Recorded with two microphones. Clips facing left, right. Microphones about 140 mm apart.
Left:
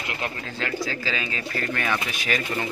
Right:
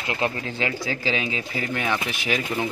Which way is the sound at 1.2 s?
15° right (ahead or behind).